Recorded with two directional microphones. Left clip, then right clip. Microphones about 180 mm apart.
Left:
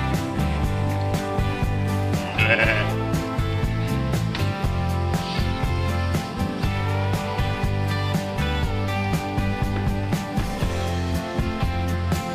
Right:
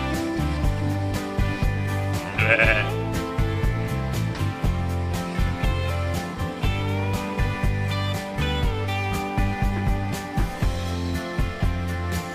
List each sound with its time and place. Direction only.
2.3 s music: 15° right (ahead or behind)